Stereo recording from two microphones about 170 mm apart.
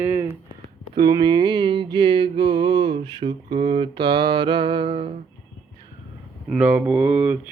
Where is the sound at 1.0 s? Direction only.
25° right (ahead or behind).